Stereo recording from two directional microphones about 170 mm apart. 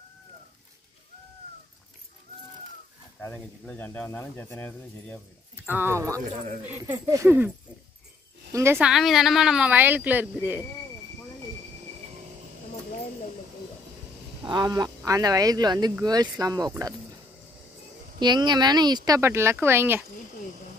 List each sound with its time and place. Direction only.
3.2 s speech: 10° left (ahead or behind)
5.7 s speech: 15° right (ahead or behind)
8.7 s speech: centre (ahead or behind)
14.5 s speech: 25° right (ahead or behind)
18.2 s speech: 25° right (ahead or behind)